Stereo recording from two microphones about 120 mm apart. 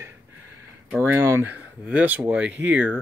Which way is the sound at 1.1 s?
20° right (ahead or behind).